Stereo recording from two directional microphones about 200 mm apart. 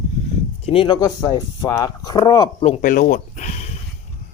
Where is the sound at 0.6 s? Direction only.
25° left (ahead or behind).